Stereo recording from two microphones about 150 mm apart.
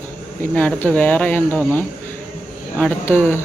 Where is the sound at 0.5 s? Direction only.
10° left (ahead or behind).